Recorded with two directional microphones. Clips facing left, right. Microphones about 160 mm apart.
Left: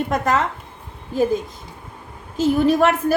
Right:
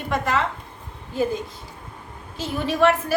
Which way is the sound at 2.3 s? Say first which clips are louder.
Left 9 dB; 40° left (ahead or behind).